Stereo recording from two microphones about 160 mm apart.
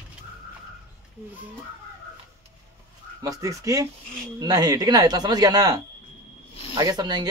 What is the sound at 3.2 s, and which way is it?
Speech, 20° right (ahead or behind).